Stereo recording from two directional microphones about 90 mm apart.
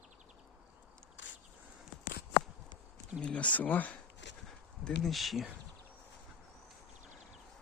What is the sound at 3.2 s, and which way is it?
Speech, 15° left (ahead or behind).